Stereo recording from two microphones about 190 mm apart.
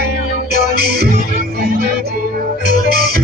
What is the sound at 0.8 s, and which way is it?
Music, 55° right (ahead or behind).